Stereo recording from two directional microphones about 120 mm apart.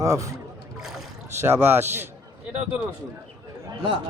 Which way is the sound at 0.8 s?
5° right (ahead or behind).